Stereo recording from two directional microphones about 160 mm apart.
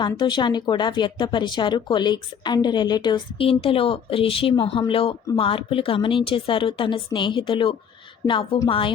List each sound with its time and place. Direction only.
0.0 s speech: 30° left (ahead or behind)